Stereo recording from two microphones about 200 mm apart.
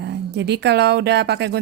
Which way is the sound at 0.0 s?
60° right (ahead or behind).